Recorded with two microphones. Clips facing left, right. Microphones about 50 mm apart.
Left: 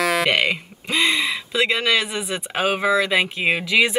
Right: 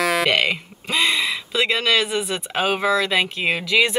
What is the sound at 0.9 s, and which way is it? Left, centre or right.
Speech, left.